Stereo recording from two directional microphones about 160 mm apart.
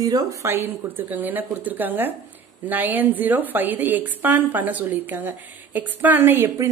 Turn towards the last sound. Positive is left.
turn(degrees=-15)  # may be behind; listen again after turning